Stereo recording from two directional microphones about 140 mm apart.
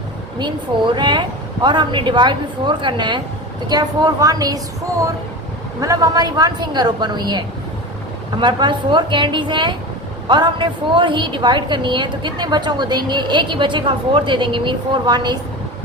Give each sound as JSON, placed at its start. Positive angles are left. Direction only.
{"t": 0.9, "sound": "a woman's voice", "side_deg": -30}